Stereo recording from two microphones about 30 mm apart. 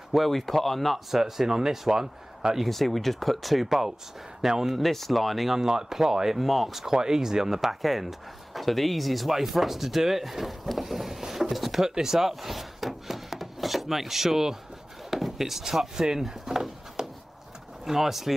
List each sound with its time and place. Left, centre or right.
0.1 s speech: centre
1.2 s a man's voice: centre
2.7 s a man's voice: centre
4.7 s speech: centre
5.6 s a man's voice: centre
6.4 s speech: centre
6.7 s a man's voice: centre
11.5 s drawer open or close: centre
11.8 s speech: centre
15.0 s a sound: centre
15.3 s a man's voice: centre